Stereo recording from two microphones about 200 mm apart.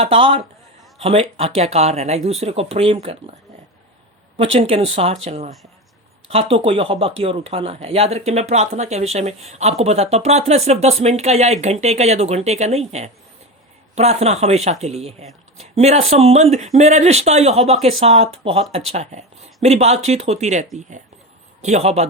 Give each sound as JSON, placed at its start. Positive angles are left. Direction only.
{"t": 0.0, "sound": "speech", "side_deg": -30}
{"t": 4.5, "sound": "speech", "side_deg": -30}
{"t": 6.7, "sound": "speech", "side_deg": -30}